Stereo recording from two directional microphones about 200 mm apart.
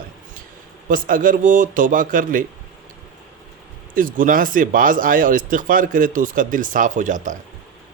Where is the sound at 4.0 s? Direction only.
45° right (ahead or behind).